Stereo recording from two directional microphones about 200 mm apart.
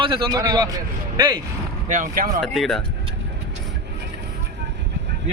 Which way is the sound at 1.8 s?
40° right (ahead or behind).